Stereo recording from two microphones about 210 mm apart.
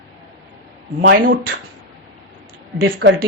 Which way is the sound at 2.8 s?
50° right (ahead or behind).